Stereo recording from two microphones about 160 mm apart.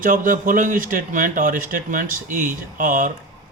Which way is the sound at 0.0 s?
55° right (ahead or behind).